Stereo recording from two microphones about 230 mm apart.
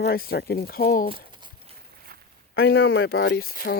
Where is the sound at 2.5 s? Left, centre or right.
Left.